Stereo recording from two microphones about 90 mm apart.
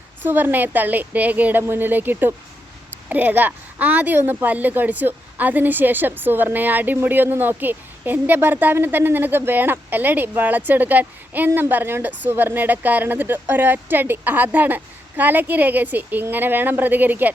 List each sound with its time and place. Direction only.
0.2 s a woman's voice: 20° right (ahead or behind)